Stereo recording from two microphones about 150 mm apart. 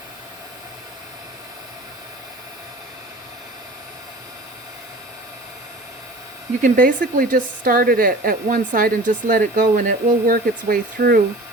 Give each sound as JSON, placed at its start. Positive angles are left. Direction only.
{"t": 6.6, "sound": "a woman's voice", "side_deg": -65}